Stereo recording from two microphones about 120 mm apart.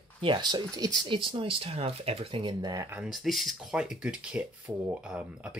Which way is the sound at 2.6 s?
30° right (ahead or behind).